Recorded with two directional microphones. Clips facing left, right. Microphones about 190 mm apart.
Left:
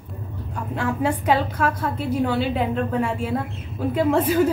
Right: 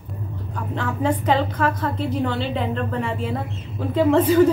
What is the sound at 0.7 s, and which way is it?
A woman's voice, 10° left (ahead or behind).